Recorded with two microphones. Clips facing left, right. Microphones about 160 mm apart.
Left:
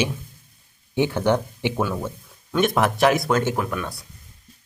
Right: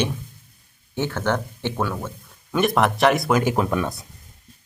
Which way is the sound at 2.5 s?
Centre (ahead or behind).